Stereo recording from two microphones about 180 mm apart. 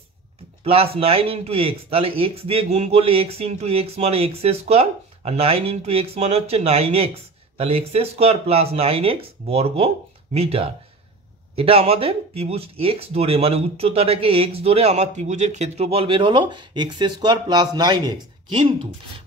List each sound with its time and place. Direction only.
0.7 s speech: 30° right (ahead or behind)